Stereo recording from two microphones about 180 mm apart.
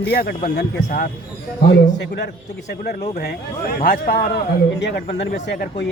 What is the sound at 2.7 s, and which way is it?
Speech, 60° left (ahead or behind).